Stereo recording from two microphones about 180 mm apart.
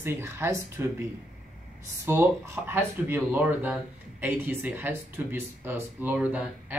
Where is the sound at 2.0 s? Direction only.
15° right (ahead or behind).